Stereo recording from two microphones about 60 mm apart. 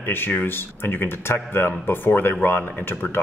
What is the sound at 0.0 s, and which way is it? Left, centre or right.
A man's voice, left.